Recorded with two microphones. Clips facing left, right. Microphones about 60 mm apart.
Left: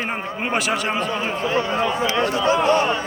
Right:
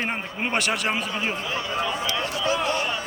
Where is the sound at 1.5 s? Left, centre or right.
Left.